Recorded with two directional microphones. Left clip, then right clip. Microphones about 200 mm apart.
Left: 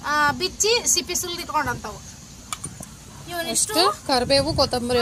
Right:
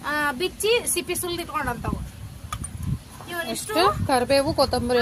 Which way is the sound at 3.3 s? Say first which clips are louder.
Left 2 dB; centre (ahead or behind).